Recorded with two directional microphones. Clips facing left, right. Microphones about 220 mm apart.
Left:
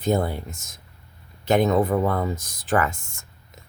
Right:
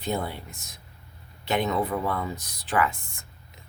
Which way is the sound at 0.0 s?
45° left (ahead or behind).